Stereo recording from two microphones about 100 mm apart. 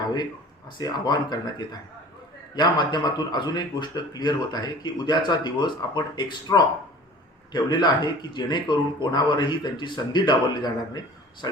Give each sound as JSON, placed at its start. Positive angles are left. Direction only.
{"t": 0.8, "sound": "a man's voice", "side_deg": 45}